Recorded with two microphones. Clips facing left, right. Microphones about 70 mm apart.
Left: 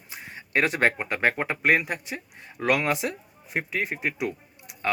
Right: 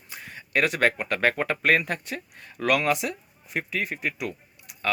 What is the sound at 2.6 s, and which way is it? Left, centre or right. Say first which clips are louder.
Speech: right 1 dB; left.